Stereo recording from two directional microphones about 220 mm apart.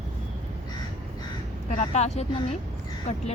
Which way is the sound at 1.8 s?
30° left (ahead or behind).